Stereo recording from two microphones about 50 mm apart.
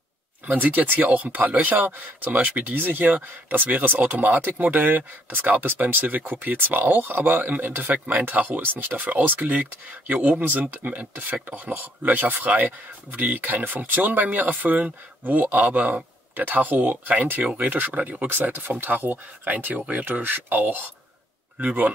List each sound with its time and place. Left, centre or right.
0.5 s speech: right
20.1 s speech: right